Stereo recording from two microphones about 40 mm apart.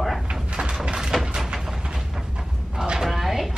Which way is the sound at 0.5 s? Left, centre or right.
Centre.